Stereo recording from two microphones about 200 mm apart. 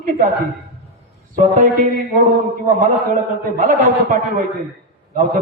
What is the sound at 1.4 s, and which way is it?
Speech, 40° right (ahead or behind).